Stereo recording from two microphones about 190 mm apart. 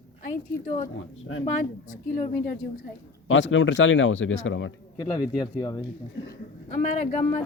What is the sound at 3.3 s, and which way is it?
Speech, 90° left.